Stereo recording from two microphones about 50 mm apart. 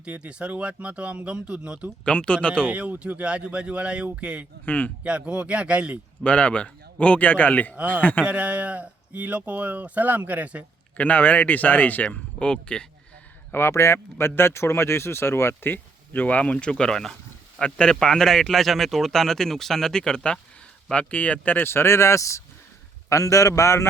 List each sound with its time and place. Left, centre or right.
0.0 s speech: right
2.0 s a man's voice: left
2.6 s speech: right
4.6 s speech: left
5.0 s speech: right
6.2 s a man's voice: left
7.8 s a man's voice: right
10.9 s speech: left
12.0 s a man's voice: left
13.5 s a man's voice: left
21.7 s speech: left